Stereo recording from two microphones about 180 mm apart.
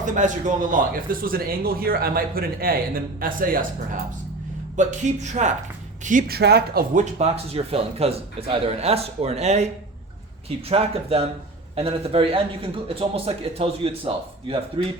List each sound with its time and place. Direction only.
0.0 s a man's voice: 45° right (ahead or behind)
6.1 s speech: 50° right (ahead or behind)
6.9 s a man's voice: 40° right (ahead or behind)
10.7 s a man's voice: 35° right (ahead or behind)